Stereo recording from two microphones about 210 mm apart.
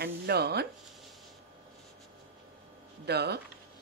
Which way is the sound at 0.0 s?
50° right (ahead or behind).